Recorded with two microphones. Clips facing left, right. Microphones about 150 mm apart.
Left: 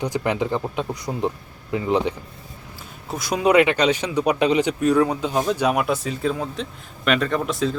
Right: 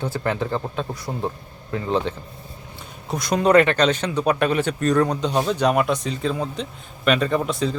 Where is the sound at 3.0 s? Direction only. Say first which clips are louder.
Right 1 dB; 5° left (ahead or behind).